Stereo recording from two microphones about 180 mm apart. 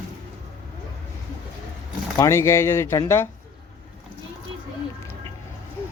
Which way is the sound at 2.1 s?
15° left (ahead or behind).